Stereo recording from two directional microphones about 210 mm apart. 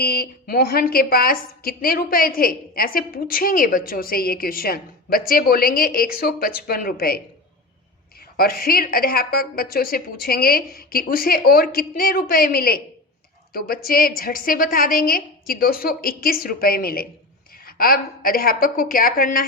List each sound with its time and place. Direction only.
0.0 s a woman's voice: 45° left (ahead or behind)
8.4 s a woman's voice: 45° left (ahead or behind)